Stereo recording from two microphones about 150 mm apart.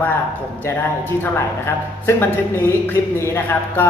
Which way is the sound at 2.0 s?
15° left (ahead or behind).